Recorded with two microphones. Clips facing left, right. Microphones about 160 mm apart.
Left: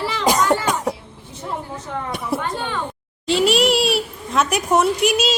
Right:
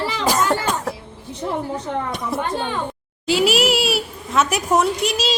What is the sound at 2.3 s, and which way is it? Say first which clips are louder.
Speech: left 1 dB; 10° left (ahead or behind).